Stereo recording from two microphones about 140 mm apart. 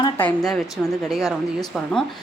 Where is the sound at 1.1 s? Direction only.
Centre (ahead or behind).